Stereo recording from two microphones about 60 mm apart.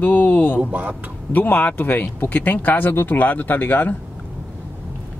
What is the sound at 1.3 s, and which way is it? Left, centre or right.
Speech, left.